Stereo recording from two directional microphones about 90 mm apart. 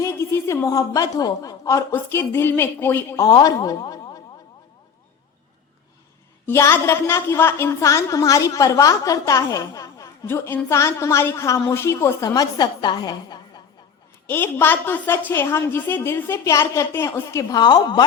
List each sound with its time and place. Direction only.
0.0 s a woman's voice: 30° left (ahead or behind)
1.9 s a woman's voice: 30° left (ahead or behind)
3.4 s speech: 45° left (ahead or behind)
6.4 s a woman's voice: 30° left (ahead or behind)
10.2 s a woman's voice: 25° left (ahead or behind)
12.3 s a woman's voice: 50° left (ahead or behind)
14.3 s a woman's voice: 25° left (ahead or behind)
17.5 s a woman's voice: 50° left (ahead or behind)